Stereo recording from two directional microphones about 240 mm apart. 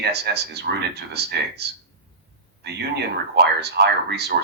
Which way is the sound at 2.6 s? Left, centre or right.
Right.